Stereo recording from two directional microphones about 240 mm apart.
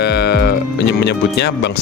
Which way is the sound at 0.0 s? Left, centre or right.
Left.